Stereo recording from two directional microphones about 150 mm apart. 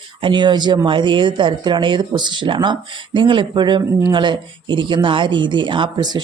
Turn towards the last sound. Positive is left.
turn(degrees=-30)  # may be behind; listen again after turning